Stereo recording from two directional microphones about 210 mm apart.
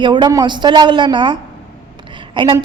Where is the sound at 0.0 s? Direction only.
20° right (ahead or behind).